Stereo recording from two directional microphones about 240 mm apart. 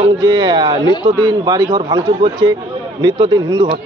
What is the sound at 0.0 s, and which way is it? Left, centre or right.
A man's voice, centre.